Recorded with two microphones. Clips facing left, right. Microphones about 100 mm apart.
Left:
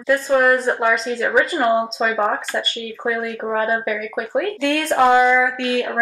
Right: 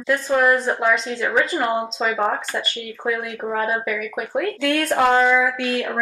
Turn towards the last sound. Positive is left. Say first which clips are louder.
# left 2 dB
turn(degrees=0)  # may be behind; listen again after turning